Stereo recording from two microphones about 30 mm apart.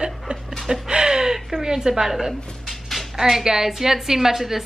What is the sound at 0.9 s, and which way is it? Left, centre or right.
A woman's voice, right.